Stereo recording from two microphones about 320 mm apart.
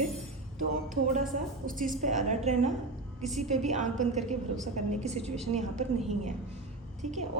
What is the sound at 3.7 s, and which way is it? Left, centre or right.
A woman's voice, right.